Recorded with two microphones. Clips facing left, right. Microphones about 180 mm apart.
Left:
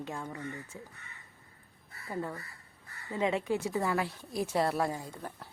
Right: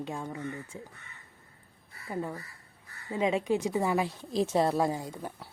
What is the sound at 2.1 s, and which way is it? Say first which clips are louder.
A woman's voice: right 2 dB; 15° right (ahead or behind).